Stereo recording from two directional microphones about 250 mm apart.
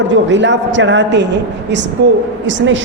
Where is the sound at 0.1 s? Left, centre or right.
Right.